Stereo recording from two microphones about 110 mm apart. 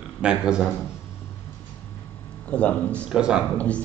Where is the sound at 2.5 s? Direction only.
10° left (ahead or behind).